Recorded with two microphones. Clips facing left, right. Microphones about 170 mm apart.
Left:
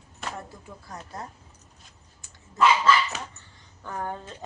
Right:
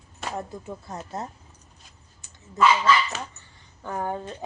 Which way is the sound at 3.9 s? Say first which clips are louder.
Right 4 dB; 15° right (ahead or behind).